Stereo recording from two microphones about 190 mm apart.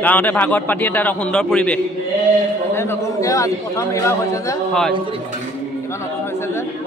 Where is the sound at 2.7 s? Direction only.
15° left (ahead or behind).